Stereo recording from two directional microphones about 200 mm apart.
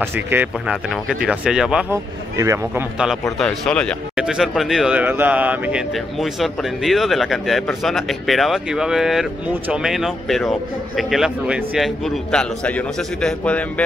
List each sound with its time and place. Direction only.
0.1 s speech: 10° right (ahead or behind)
2.3 s a man's voice: 15° right (ahead or behind)
3.3 s speech: 5° left (ahead or behind)